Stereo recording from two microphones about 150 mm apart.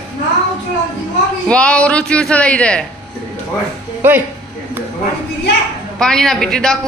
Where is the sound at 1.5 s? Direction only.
5° left (ahead or behind).